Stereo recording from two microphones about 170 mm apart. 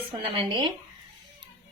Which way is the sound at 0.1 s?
25° right (ahead or behind).